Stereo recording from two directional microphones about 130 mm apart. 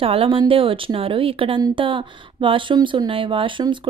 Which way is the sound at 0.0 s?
45° right (ahead or behind).